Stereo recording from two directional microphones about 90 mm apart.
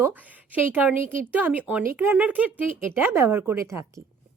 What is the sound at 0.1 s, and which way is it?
Speech, 20° right (ahead or behind).